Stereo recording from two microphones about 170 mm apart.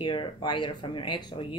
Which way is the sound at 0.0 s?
30° left (ahead or behind).